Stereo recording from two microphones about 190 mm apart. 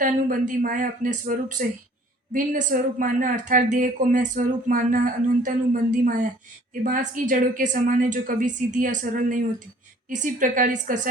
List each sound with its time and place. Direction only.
0.0 s a woman's voice: 45° right (ahead or behind)
7.3 s a woman's voice: 40° right (ahead or behind)